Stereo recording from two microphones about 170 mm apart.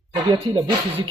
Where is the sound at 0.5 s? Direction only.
30° right (ahead or behind).